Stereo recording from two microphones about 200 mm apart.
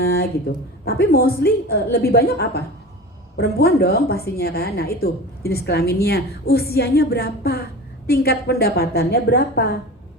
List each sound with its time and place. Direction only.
0.0 s a woman's voice: 50° left (ahead or behind)